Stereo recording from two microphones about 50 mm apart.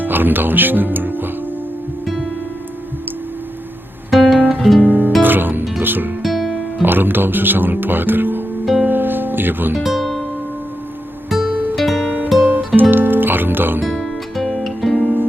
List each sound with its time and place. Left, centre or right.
0.0 s speech: right
2.0 s music: centre
4.1 s guitar: centre
4.4 s guitar: right
4.9 s music: right
6.2 s music: centre
6.8 s speech: right
8.9 s music: right
9.8 s music: centre
11.3 s music: centre
12.4 s music: right
14.0 s music: centre